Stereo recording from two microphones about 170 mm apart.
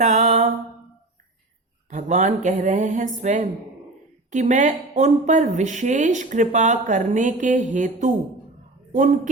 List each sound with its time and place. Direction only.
0.0 s music: 45° right (ahead or behind)
1.9 s speech: 45° right (ahead or behind)